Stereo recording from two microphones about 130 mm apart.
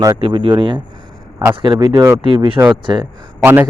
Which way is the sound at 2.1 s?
35° right (ahead or behind).